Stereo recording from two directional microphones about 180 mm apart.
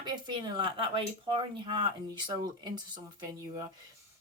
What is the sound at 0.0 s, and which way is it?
Speech, 25° right (ahead or behind).